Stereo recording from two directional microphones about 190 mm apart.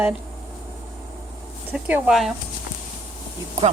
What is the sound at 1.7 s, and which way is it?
Speech, 5° right (ahead or behind).